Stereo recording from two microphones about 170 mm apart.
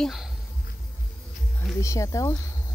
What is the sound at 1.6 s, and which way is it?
Speech, 20° left (ahead or behind).